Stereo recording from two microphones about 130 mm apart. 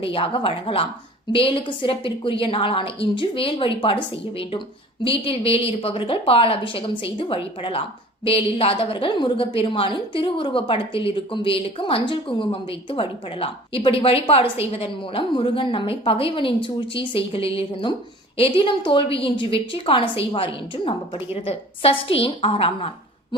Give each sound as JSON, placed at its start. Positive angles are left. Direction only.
{"t": 0.0, "sound": "a woman's voice", "side_deg": 45}
{"t": 5.0, "sound": "a woman's voice", "side_deg": 45}